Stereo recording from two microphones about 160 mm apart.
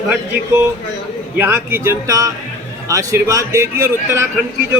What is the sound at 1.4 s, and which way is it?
A man's voice, 15° right (ahead or behind).